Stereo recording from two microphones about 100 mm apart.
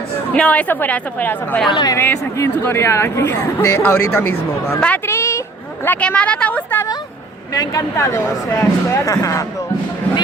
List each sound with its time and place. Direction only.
0.3 s speech: 15° left (ahead or behind)
1.7 s speech: 40° left (ahead or behind)
2.0 s speech: 25° left (ahead or behind)
5.0 s a sound: 30° left (ahead or behind)
5.8 s speech: 15° left (ahead or behind)
7.5 s speech: 35° left (ahead or behind)